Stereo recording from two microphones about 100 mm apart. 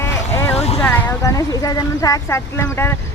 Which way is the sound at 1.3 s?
35° left (ahead or behind).